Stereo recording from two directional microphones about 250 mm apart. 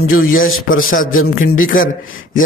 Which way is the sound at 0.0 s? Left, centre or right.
Left.